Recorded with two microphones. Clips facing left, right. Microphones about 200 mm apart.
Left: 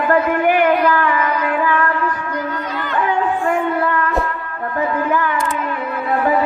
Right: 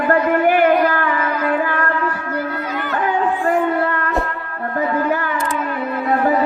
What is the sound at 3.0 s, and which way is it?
Music, 35° right (ahead or behind).